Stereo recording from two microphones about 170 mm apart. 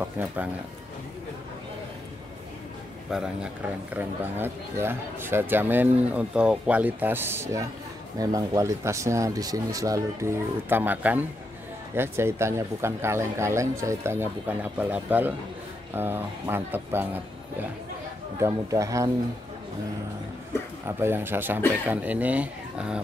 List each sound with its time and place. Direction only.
0.0 s speech: 10° right (ahead or behind)
3.9 s speech: 10° right (ahead or behind)
20.8 s speech: 15° right (ahead or behind)